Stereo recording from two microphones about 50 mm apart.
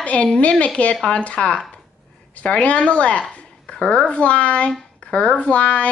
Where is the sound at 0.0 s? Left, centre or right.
Left.